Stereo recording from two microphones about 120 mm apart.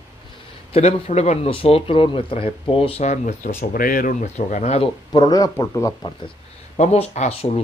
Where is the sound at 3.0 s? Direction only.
85° left.